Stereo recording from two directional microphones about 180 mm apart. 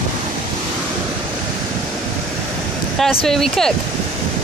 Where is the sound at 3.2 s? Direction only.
Centre (ahead or behind).